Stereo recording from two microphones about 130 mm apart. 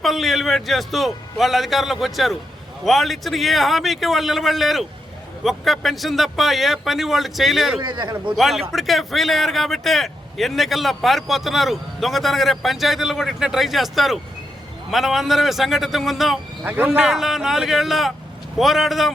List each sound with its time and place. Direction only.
0.0 s a man's voice: centre (ahead or behind)
7.8 s a man's voice: 35° right (ahead or behind)
8.4 s a man's voice: centre (ahead or behind)
16.6 s a man's voice: 15° right (ahead or behind)